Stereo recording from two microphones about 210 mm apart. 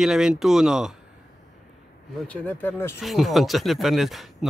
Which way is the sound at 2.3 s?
10° left (ahead or behind).